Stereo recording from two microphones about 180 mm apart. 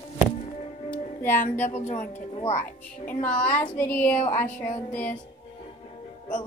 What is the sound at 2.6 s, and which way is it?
A woman's voice, 10° left (ahead or behind).